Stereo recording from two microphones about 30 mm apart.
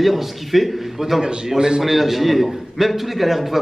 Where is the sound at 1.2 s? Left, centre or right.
Right.